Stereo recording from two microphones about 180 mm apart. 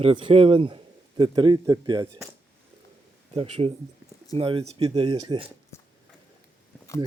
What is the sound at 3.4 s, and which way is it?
Speech, 35° right (ahead or behind).